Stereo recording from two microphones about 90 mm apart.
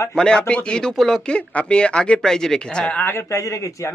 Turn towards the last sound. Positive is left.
turn(degrees=40)  # may be behind; listen again after turning